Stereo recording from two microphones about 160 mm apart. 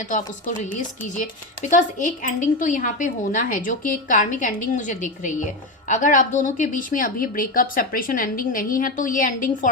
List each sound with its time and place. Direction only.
0.0 s a woman's voice: 55° left (ahead or behind)